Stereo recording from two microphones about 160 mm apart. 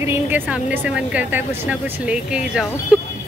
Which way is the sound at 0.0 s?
15° right (ahead or behind).